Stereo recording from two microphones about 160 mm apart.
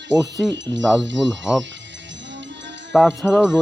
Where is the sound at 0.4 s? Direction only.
Centre (ahead or behind).